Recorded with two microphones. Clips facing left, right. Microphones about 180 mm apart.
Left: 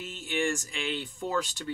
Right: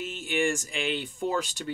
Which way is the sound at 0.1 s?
10° right (ahead or behind).